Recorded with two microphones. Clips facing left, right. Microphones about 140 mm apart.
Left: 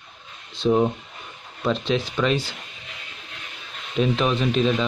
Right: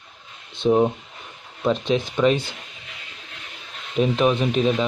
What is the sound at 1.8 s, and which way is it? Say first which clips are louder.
Speech: right 2 dB; 50° right (ahead or behind).